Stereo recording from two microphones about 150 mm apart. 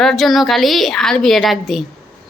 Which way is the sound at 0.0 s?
Centre (ahead or behind).